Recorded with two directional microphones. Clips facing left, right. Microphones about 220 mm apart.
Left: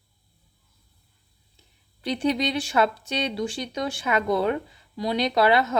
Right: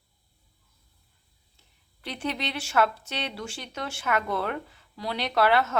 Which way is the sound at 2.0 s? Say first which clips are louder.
Left 8 dB; 15° left (ahead or behind).